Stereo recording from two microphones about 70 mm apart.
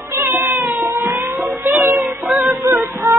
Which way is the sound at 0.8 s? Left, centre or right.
Right.